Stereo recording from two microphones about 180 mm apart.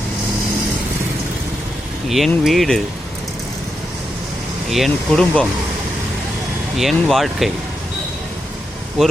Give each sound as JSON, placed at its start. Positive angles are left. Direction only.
{"t": 2.0, "sound": "speech", "side_deg": 0}
{"t": 4.7, "sound": "speech", "side_deg": 0}
{"t": 6.7, "sound": "speech", "side_deg": 0}
{"t": 9.0, "sound": "speech", "side_deg": 0}